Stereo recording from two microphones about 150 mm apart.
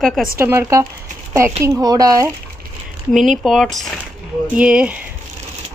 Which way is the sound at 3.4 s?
Centre (ahead or behind).